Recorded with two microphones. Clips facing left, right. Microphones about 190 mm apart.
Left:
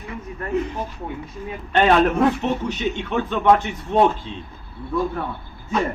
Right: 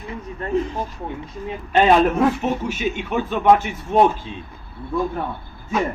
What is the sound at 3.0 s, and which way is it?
Speech, 15° right (ahead or behind).